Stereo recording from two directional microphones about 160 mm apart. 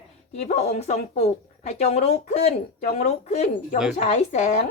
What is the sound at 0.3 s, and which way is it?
Speech, 45° left (ahead or behind).